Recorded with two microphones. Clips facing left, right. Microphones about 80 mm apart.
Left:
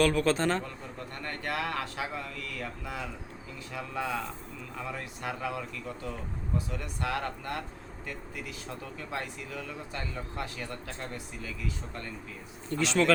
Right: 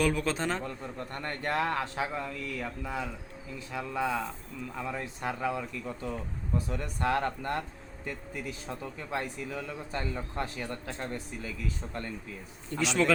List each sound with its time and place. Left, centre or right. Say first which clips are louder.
0.0 s a man's voice: left 3 dB; centre
0.6 s a man's voice: right 3 dB; right
6.7 s speech: right 4 dB; right
9.9 s a man's voice: right 5 dB; right
12.7 s speech: left 1 dB; centre